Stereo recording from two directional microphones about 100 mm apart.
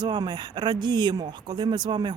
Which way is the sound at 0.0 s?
45° right (ahead or behind).